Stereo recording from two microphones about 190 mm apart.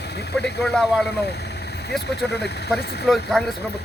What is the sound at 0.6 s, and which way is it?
Speech, centre (ahead or behind).